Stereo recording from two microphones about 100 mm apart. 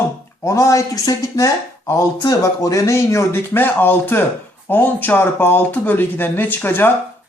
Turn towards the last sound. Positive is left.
turn(degrees=20)  # may be behind; listen again after turning